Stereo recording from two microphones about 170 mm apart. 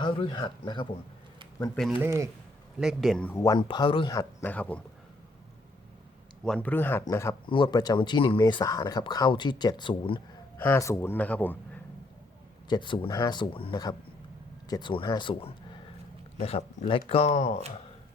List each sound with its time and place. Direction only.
0.0 s speech: 25° left (ahead or behind)
2.0 s speech: 15° right (ahead or behind)
2.8 s speech: centre (ahead or behind)
3.4 s speech: 25° left (ahead or behind)
4.1 s a man's voice: 15° left (ahead or behind)
6.4 s a man's voice: 5° left (ahead or behind)
7.4 s speech: 30° left (ahead or behind)
10.6 s a man's voice: 15° left (ahead or behind)
12.6 s speech: 25° left (ahead or behind)